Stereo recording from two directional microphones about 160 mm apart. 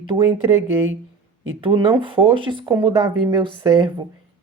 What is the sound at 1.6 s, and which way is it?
Speech, 30° right (ahead or behind).